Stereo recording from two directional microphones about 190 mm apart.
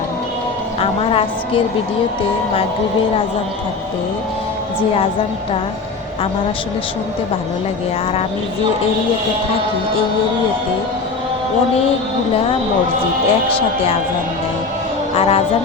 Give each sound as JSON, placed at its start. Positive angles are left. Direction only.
{"t": 0.8, "sound": "a woman's voice", "side_deg": 30}
{"t": 15.1, "sound": "speech", "side_deg": 30}